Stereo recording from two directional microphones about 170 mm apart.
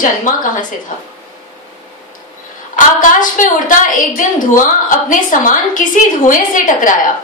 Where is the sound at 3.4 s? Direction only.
50° left (ahead or behind).